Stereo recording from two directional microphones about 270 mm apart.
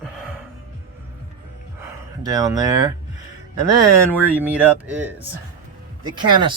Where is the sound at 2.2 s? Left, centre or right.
Centre.